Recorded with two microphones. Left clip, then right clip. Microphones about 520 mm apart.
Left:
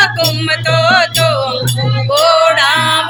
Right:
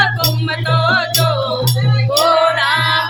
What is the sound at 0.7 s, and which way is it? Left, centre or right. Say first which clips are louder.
Music: left 4 dB; right.